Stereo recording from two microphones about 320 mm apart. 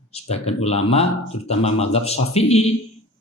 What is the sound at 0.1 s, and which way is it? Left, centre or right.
Speech, centre.